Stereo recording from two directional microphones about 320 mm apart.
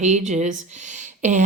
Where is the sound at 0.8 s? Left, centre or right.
Right.